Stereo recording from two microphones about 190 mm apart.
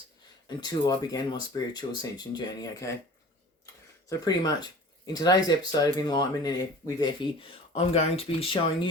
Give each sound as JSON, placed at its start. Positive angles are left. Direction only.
{"t": 0.4, "sound": "speech", "side_deg": 20}
{"t": 4.1, "sound": "speech", "side_deg": 20}